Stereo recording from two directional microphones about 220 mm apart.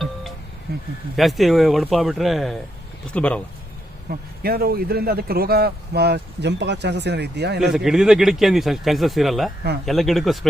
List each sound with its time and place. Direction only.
1.1 s a man's voice: centre (ahead or behind)
4.1 s a man's voice: 45° right (ahead or behind)
7.6 s a man's voice: centre (ahead or behind)